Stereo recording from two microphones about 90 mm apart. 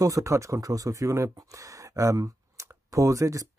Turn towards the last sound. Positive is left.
turn(degrees=-35)  # may be behind; listen again after turning